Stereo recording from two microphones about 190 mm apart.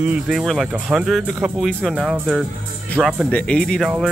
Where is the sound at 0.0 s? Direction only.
5° right (ahead or behind).